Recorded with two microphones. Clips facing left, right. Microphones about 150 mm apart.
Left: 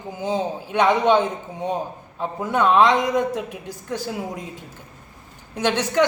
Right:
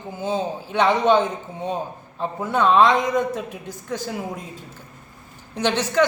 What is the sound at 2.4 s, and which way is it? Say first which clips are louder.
A man's voice: even; 10° left (ahead or behind).